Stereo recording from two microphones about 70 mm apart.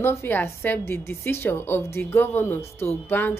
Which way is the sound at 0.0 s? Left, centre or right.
Left.